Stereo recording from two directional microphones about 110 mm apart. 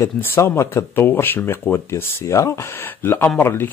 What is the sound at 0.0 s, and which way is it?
Speech, 20° left (ahead or behind).